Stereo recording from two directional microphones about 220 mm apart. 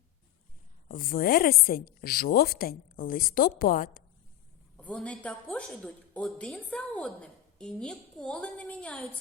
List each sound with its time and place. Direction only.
0.9 s a woman's voice: 40° left (ahead or behind)
4.8 s a woman's voice: 5° left (ahead or behind)